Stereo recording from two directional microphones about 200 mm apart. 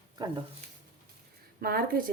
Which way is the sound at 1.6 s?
50° right (ahead or behind).